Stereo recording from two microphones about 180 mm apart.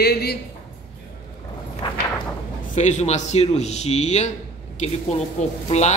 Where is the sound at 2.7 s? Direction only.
40° left (ahead or behind).